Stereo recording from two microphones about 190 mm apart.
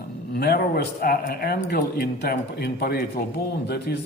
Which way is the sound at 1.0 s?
50° left (ahead or behind).